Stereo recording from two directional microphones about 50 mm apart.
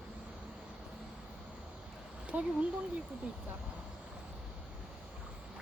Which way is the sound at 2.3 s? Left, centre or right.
Right.